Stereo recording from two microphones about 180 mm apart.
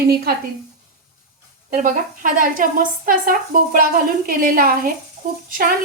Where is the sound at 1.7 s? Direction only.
45° right (ahead or behind).